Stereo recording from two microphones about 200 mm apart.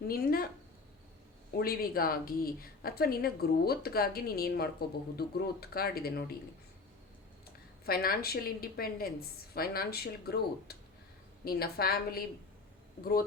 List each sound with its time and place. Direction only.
0.1 s a woman's voice: 50° left (ahead or behind)
1.5 s a woman's voice: 50° left (ahead or behind)
7.9 s a woman's voice: 50° left (ahead or behind)